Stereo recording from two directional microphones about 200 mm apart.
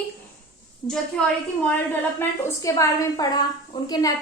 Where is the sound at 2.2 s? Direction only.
15° left (ahead or behind).